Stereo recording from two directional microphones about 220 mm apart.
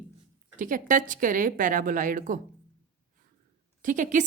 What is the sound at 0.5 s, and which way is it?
A woman's voice, 35° right (ahead or behind).